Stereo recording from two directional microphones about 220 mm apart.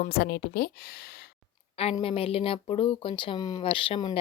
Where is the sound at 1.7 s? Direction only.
25° left (ahead or behind).